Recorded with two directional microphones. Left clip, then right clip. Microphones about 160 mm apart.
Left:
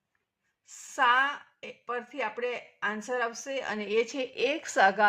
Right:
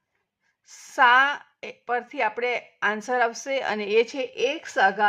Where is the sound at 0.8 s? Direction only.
35° right (ahead or behind); by 5.0 s 15° right (ahead or behind).